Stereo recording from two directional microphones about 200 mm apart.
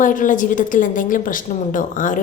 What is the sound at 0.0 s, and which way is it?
A woman's voice, 40° left (ahead or behind).